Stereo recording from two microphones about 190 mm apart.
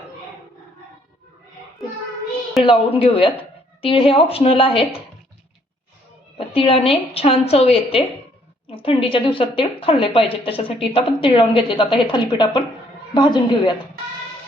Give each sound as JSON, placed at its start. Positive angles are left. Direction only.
{"t": 3.0, "sound": "speech", "side_deg": 30}
{"t": 6.3, "sound": "speech", "side_deg": 30}